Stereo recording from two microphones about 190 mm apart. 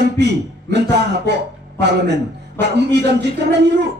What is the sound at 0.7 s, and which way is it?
Speech, 60° right (ahead or behind).